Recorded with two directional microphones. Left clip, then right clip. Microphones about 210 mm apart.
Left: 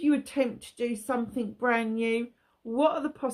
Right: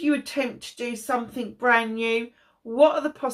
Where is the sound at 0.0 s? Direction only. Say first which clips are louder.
Right 2 dB; 40° left (ahead or behind).